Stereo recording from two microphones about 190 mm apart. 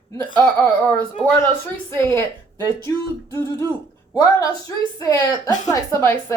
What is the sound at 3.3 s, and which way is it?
Speech, 15° left (ahead or behind).